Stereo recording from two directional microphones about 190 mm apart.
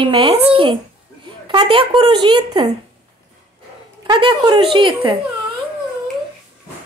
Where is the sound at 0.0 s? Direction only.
30° right (ahead or behind).